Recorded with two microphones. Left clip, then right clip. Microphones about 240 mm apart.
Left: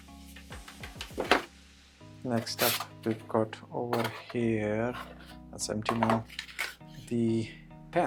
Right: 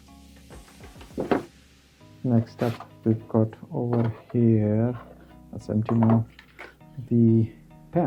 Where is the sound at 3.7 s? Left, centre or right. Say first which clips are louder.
Right 4 dB; left.